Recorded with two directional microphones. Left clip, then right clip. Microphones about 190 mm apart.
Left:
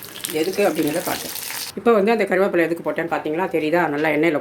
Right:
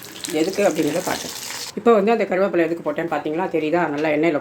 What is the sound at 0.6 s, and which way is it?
Speech, centre (ahead or behind).